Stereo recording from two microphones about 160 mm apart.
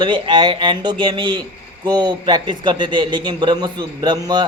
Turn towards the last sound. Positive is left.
turn(degrees=-25)  # may be behind; listen again after turning